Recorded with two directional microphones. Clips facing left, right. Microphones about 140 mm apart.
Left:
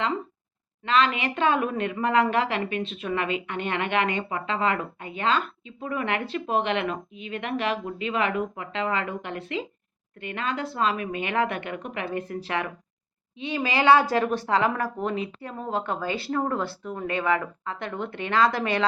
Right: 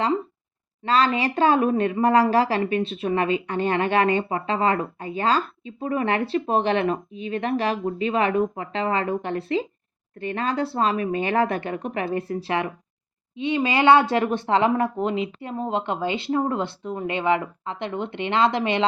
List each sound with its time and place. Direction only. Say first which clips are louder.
0.9 s a woman's voice: right 3 dB; 35° right (ahead or behind)